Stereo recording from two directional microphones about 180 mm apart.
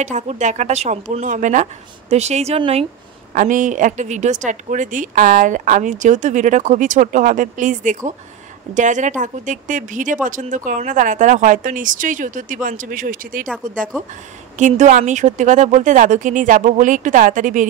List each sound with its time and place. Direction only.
0.0 s speech: 40° right (ahead or behind)
3.3 s a woman's voice: 45° right (ahead or behind)
14.6 s a woman's voice: 45° right (ahead or behind)